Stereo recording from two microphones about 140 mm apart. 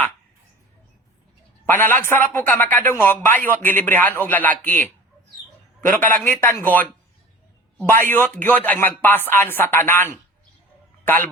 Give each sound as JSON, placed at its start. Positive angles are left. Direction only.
{"t": 1.6, "sound": "a man's voice", "side_deg": 15}